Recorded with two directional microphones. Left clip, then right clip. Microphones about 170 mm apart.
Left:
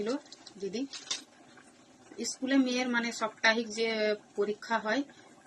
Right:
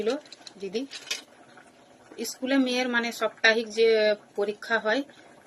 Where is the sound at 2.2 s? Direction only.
20° left (ahead or behind).